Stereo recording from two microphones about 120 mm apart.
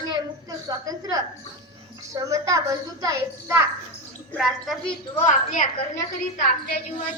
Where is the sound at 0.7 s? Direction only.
30° right (ahead or behind).